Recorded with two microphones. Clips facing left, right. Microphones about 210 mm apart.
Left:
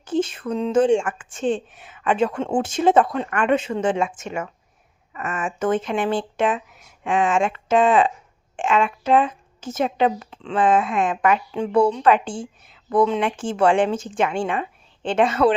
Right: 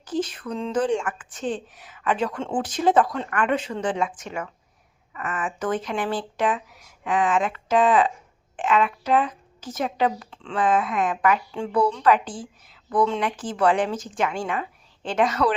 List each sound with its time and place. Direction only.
0.0 s speech: 25° left (ahead or behind)